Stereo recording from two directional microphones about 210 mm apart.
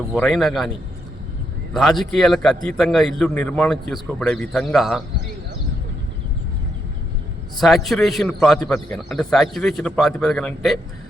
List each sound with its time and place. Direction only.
0.1 s a man's voice: centre (ahead or behind)
1.7 s a man's voice: centre (ahead or behind)
7.6 s a man's voice: centre (ahead or behind)